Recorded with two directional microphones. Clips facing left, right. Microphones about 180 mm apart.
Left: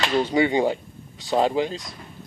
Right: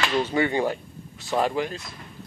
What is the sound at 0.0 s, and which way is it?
Speech, 15° left (ahead or behind).